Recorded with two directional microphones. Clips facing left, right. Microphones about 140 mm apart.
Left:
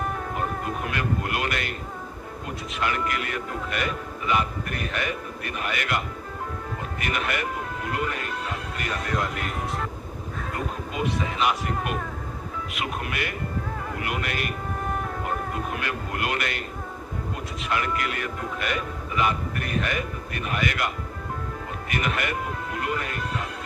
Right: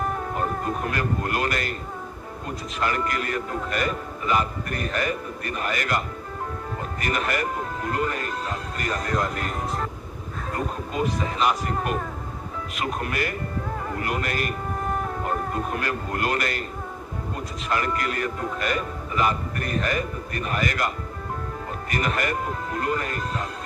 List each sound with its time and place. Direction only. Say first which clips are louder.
0.3 s speech: right 3 dB; 40° right (ahead or behind)
2.8 s a man's voice: right 2 dB; 40° right (ahead or behind)
7.0 s a man's voice: right 2 dB; 40° right (ahead or behind)
17.7 s a man's voice: right 1 dB; 40° right (ahead or behind)